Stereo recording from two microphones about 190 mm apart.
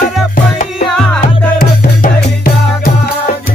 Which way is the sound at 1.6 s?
50° left (ahead or behind).